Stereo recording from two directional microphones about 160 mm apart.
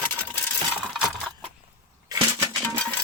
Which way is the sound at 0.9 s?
Centre (ahead or behind).